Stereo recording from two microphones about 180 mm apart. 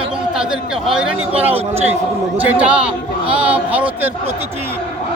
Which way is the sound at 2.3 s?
10° right (ahead or behind).